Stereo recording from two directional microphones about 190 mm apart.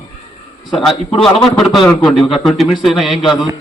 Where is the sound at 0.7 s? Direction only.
Centre (ahead or behind).